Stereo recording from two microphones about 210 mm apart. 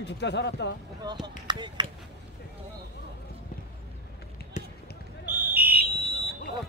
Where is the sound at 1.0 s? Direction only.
20° right (ahead or behind).